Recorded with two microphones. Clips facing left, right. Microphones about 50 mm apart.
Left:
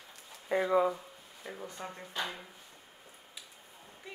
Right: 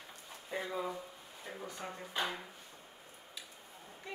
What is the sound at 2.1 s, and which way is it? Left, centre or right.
Speech, centre.